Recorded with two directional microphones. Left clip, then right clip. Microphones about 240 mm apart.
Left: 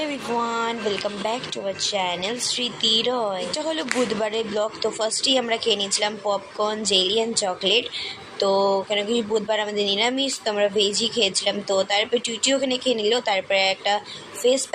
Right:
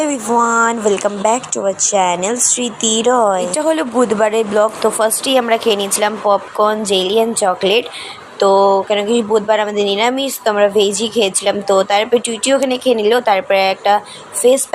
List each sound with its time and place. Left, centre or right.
0.0 s speech: right